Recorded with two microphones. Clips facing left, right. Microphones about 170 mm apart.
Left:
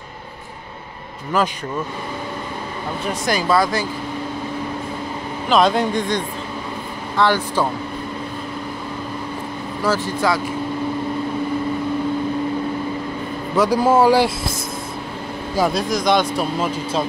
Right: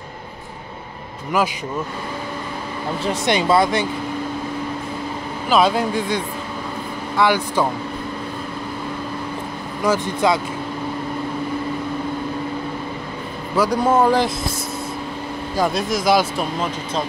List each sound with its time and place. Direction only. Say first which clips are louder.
3.0 s speech: right 2 dB; 25° right (ahead or behind)
5.5 s speech: left 1 dB; 5° right (ahead or behind)
9.8 s speech: right 1 dB; 20° right (ahead or behind)
13.6 s a man's voice: left 2 dB; 5° left (ahead or behind)
15.5 s speech: left 1 dB; centre (ahead or behind)
16.5 s a man's voice: left 2 dB; 5° left (ahead or behind)